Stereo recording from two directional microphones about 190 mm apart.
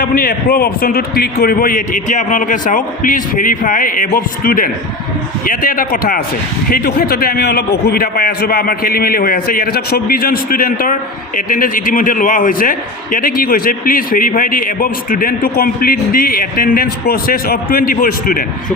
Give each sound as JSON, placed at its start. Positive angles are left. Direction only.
{"t": 0.0, "sound": "a man's voice", "side_deg": 50}